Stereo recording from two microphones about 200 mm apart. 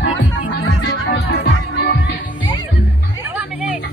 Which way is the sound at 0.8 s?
55° left (ahead or behind).